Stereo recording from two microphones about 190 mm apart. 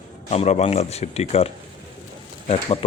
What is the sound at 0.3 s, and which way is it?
Speech, 35° left (ahead or behind).